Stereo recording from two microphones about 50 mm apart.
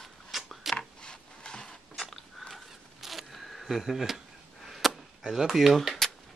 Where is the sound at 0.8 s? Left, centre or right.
Centre.